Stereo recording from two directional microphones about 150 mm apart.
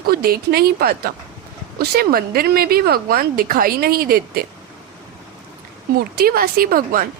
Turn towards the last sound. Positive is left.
turn(degrees=-70)  # may be behind; listen again after turning